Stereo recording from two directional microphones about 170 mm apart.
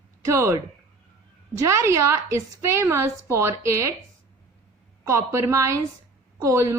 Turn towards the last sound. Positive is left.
turn(degrees=-20)  # may be behind; listen again after turning